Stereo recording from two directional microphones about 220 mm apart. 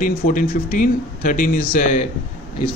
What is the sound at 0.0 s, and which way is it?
Speech, 40° left (ahead or behind).